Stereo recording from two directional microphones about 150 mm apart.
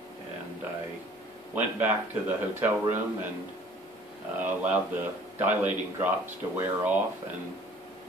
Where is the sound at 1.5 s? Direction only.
10° right (ahead or behind).